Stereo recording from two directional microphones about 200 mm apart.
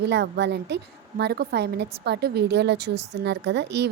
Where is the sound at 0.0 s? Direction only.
60° right (ahead or behind).